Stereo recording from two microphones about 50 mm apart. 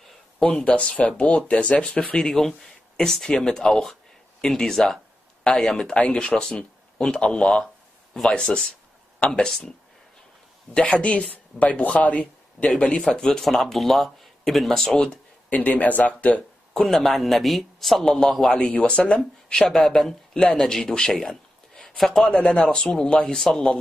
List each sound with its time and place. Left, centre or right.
0.4 s a man's voice: left
5.9 s speech: left
6.2 s a man's voice: centre
10.7 s speech: centre
15.5 s speech: left
16.7 s a man's voice: centre